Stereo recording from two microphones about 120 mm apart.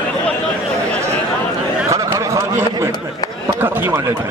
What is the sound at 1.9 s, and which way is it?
Chatter, 25° right (ahead or behind).